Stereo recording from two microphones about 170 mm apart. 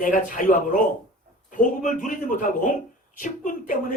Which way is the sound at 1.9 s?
50° left (ahead or behind).